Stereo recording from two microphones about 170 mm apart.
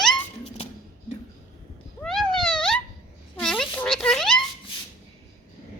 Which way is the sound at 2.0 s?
Centre (ahead or behind).